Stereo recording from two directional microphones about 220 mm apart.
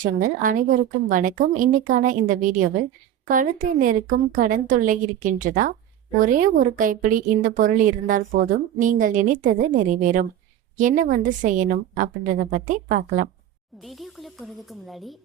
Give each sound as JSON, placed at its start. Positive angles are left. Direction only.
{"t": 0.0, "sound": "a woman's voice", "side_deg": -35}
{"t": 13.8, "sound": "a woman's voice", "side_deg": 0}